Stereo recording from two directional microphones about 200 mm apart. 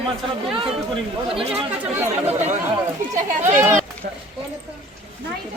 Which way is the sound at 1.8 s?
10° right (ahead or behind).